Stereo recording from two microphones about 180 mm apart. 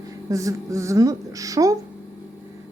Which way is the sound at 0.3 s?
15° right (ahead or behind).